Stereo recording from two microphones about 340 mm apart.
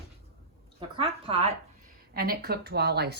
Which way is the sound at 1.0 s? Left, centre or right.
Centre.